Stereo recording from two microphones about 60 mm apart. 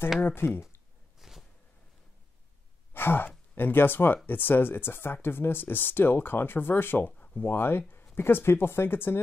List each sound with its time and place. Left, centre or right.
0.2 s speech: left
1.2 s a sound: centre
2.9 s sigh: left
3.5 s speech: left